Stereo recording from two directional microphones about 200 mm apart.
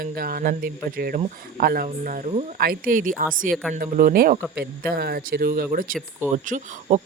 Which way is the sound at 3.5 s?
Centre (ahead or behind).